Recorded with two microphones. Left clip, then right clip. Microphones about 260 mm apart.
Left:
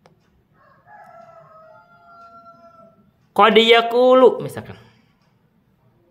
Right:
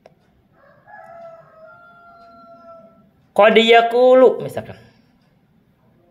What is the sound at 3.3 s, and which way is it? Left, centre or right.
A man's voice, centre.